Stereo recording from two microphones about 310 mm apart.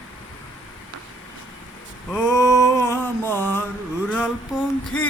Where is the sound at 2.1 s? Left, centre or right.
Centre.